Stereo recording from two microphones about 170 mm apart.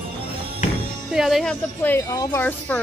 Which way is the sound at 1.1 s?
Centre (ahead or behind).